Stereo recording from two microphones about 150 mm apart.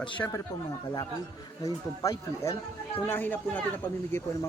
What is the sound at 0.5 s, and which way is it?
A man's voice, 20° left (ahead or behind).